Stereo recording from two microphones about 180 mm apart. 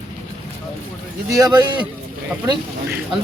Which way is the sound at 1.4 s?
25° right (ahead or behind).